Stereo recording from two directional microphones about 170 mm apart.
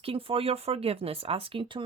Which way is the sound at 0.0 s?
35° right (ahead or behind).